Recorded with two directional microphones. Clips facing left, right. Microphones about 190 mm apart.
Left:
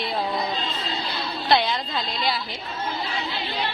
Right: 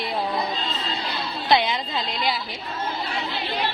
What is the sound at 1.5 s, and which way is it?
Speech, 15° right (ahead or behind).